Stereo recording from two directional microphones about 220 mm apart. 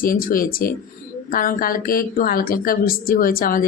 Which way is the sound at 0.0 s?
40° left (ahead or behind).